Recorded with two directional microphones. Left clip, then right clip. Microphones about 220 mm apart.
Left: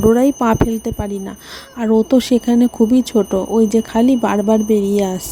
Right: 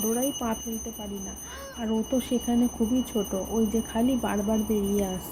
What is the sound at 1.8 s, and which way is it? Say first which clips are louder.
Speech: left 15 dB; 45° left (ahead or behind).